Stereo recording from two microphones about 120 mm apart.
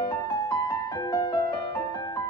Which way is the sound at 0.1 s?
30° left (ahead or behind).